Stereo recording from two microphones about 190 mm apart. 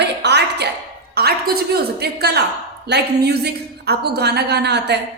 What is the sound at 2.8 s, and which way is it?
A woman's voice, 60° right (ahead or behind).